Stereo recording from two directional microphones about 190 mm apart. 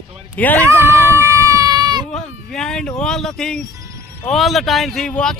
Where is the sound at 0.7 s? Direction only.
10° right (ahead or behind).